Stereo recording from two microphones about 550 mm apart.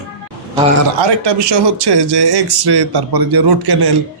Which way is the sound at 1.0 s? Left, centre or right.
Right.